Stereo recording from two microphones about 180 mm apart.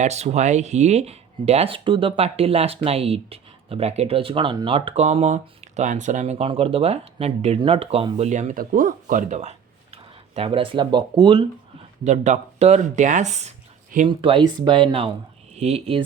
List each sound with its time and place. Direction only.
0.0 s speech: 40° right (ahead or behind)
12.0 s speech: 40° right (ahead or behind)
14.1 s speech: 30° right (ahead or behind)